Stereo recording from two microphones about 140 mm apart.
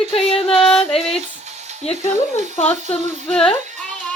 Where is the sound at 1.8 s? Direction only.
45° left (ahead or behind).